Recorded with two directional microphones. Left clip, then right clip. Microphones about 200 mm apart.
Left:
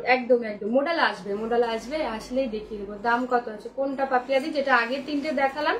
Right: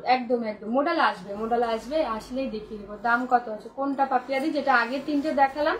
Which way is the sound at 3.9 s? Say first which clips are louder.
Left 1 dB; 15° left (ahead or behind).